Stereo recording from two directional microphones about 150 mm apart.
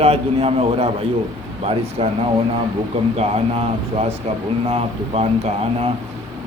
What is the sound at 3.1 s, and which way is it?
A man's voice, 45° right (ahead or behind).